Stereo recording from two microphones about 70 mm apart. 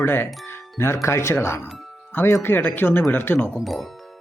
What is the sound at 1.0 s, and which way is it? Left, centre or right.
Speech, left.